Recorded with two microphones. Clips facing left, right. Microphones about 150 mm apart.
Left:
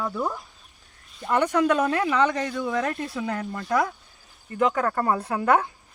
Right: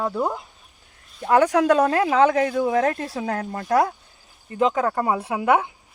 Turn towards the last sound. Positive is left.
turn(degrees=-15)  # may be behind; listen again after turning